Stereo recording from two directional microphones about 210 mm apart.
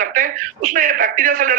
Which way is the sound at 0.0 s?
40° right (ahead or behind).